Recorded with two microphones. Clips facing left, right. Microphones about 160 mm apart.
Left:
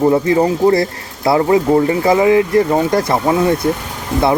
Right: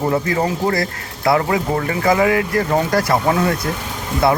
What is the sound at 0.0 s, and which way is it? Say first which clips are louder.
Speech: left 6 dB; 20° left (ahead or behind).